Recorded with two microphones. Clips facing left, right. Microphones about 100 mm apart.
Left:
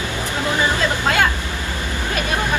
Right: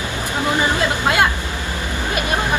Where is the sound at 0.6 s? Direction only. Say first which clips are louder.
Left 1 dB; 15° right (ahead or behind).